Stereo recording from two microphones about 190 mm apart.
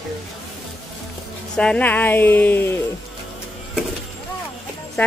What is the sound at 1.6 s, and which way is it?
Speech, 5° left (ahead or behind).